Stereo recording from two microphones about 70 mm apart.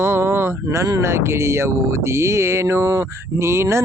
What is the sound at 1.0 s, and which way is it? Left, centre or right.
Speech, right.